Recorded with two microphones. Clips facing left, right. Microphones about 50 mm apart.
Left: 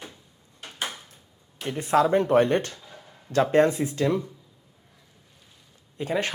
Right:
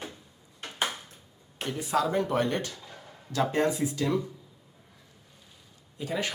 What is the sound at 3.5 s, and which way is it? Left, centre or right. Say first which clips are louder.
Speech: left 8 dB; left.